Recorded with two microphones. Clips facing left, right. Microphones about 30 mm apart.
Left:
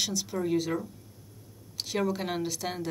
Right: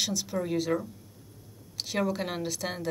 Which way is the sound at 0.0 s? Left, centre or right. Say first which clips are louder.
Even; centre.